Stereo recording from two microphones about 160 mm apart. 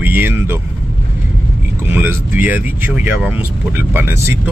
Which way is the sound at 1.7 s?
15° right (ahead or behind).